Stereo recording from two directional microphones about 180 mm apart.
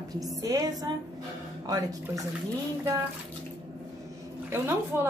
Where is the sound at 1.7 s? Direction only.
20° right (ahead or behind).